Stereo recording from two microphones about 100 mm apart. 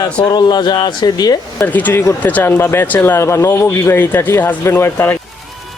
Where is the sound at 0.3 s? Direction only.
45° left (ahead or behind).